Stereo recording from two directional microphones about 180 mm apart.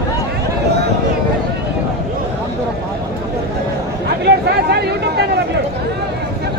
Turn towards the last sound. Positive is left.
turn(degrees=-65)  # may be behind; listen again after turning